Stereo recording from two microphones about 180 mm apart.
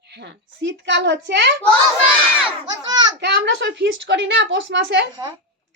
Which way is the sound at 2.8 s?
20° right (ahead or behind).